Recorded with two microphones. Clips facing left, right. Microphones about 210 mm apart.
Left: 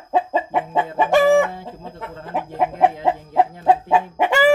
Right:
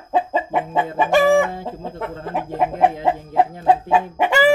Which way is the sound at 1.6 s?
60° right (ahead or behind).